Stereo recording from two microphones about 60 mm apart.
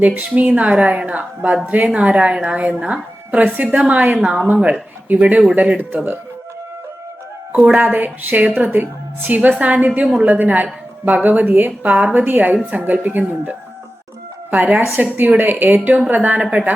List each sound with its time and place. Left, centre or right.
0.0 s a woman's voice: right
7.5 s a woman's voice: right
14.5 s a woman's voice: right